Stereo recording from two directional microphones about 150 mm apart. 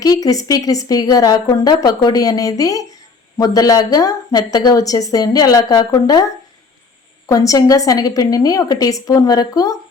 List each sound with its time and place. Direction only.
0.0 s speech: 25° left (ahead or behind)